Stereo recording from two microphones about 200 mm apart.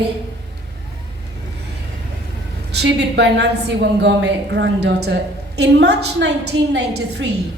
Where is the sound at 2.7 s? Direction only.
55° right (ahead or behind).